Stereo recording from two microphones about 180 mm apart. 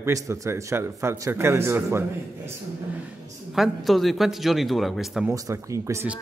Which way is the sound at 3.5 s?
Centre (ahead or behind).